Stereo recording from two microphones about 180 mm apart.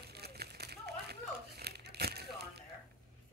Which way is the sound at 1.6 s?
65° right (ahead or behind).